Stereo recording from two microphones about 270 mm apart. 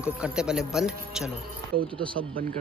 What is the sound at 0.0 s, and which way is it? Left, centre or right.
Speech, centre.